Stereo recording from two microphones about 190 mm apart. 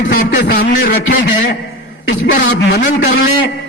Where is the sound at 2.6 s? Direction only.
50° left (ahead or behind).